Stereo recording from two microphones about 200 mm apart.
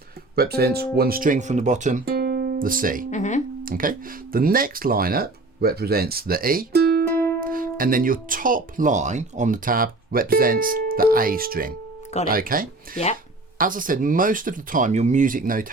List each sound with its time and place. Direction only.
0.3 s speech: 50° right (ahead or behind)
2.0 s music: 50° right (ahead or behind)
3.1 s speech: 35° left (ahead or behind)
3.6 s speech: 45° right (ahead or behind)
7.1 s music: 10° left (ahead or behind)
7.4 s speech: 45° right (ahead or behind)